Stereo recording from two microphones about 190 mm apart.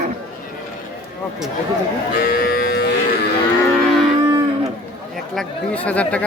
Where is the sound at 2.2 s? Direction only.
50° left (ahead or behind).